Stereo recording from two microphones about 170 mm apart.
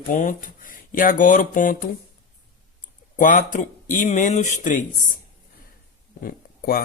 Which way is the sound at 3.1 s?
50° left (ahead or behind).